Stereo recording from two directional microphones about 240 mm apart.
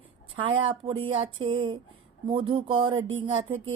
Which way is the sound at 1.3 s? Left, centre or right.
Right.